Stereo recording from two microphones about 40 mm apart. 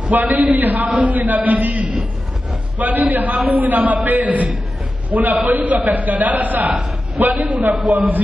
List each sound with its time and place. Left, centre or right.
0.0 s a man's voice: right